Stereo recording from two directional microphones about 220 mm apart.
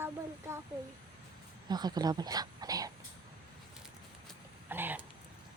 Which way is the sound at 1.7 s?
20° right (ahead or behind).